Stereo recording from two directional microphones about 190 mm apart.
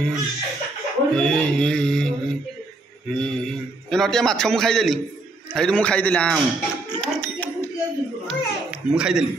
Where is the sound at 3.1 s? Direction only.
5° left (ahead or behind).